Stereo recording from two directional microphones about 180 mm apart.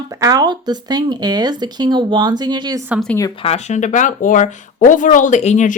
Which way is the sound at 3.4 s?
40° left (ahead or behind).